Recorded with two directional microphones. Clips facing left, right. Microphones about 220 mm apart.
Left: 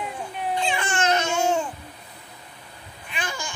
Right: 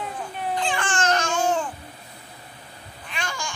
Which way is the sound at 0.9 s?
10° left (ahead or behind).